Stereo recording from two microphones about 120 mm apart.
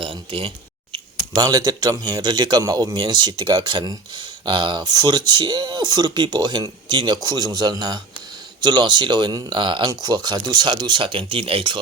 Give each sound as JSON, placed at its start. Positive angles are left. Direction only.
{"t": 0.0, "sound": "speech", "side_deg": -50}
{"t": 1.3, "sound": "a man's voice", "side_deg": -35}